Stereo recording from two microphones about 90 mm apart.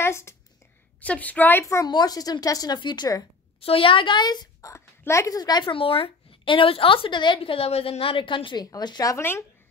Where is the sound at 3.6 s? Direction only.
85° left; by 4.7 s 50° left (ahead or behind).